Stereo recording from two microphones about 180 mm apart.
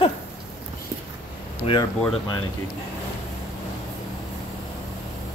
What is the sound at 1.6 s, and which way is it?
Speech, 25° left (ahead or behind).